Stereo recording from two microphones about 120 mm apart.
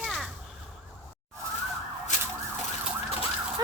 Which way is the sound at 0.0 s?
Centre (ahead or behind).